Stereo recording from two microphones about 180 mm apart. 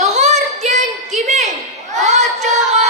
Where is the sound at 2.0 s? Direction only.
40° right (ahead or behind).